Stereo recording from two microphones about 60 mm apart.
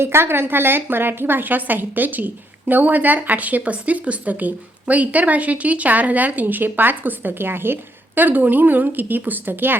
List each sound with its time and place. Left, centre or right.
0.0 s a woman's voice: right